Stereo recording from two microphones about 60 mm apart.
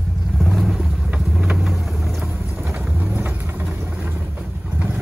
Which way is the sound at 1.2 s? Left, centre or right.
Centre.